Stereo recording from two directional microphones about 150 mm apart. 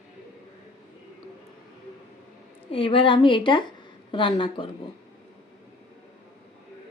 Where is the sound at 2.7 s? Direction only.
35° left (ahead or behind).